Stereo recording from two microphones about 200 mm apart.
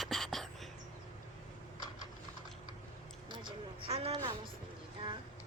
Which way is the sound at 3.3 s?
25° right (ahead or behind).